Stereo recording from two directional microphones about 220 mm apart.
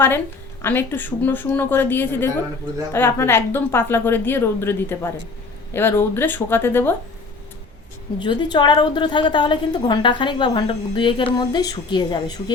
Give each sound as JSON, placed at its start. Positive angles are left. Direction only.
{"t": 0.6, "sound": "a woman's voice", "side_deg": 10}
{"t": 8.2, "sound": "a woman's voice", "side_deg": 20}